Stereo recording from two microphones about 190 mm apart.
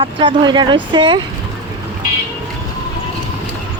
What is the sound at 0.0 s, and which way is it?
Speech, 25° right (ahead or behind).